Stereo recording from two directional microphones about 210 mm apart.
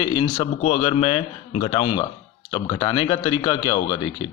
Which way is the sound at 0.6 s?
30° left (ahead or behind).